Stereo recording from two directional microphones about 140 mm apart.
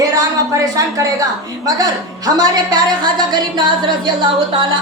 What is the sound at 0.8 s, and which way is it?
A woman's voice, 25° right (ahead or behind).